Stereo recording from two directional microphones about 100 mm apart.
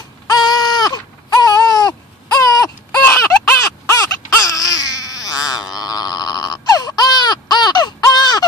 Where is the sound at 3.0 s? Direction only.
20° left (ahead or behind).